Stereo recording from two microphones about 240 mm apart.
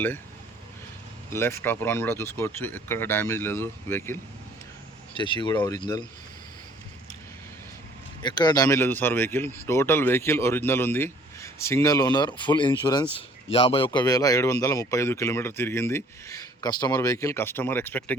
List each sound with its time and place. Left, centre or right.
1.3 s speech: centre
5.1 s speech: centre
8.2 s speech: centre